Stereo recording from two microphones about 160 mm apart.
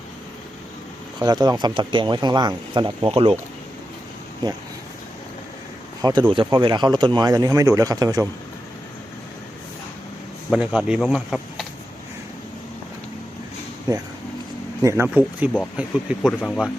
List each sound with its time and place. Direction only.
1.2 s speech: 25° right (ahead or behind)
6.0 s speech: 25° right (ahead or behind)
10.5 s speech: 5° right (ahead or behind)
13.9 s speech: 25° right (ahead or behind); by 16.3 s 5° right (ahead or behind)